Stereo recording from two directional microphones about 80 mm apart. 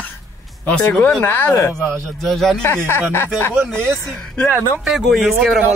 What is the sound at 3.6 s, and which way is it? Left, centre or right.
Speech, centre.